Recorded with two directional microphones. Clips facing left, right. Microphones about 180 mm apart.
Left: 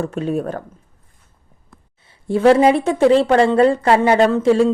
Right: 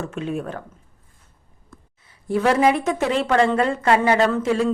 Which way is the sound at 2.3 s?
30° left (ahead or behind).